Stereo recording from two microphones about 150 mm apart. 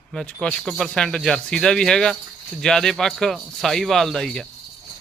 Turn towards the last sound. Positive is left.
turn(degrees=5)  # may be behind; listen again after turning